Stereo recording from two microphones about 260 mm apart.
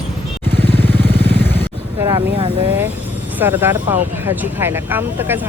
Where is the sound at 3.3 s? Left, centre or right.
Centre.